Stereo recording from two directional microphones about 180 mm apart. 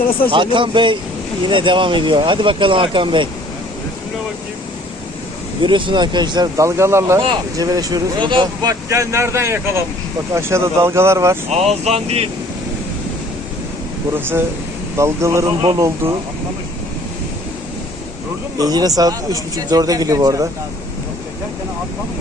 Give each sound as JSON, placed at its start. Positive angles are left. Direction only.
{"t": 0.3, "sound": "a man's voice", "side_deg": -25}
{"t": 5.6, "sound": "a man's voice", "side_deg": -25}
{"t": 8.9, "sound": "speech", "side_deg": -15}
{"t": 11.4, "sound": "speech", "side_deg": -35}
{"t": 14.9, "sound": "speech", "side_deg": -15}
{"t": 18.6, "sound": "a man's voice", "side_deg": -20}